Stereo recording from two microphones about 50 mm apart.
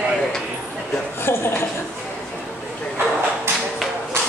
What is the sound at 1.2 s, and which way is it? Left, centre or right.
Speech, left.